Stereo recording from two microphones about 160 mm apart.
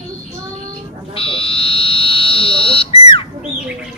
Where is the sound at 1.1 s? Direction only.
35° left (ahead or behind).